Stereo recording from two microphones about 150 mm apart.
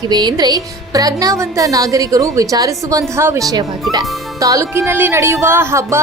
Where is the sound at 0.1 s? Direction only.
30° right (ahead or behind).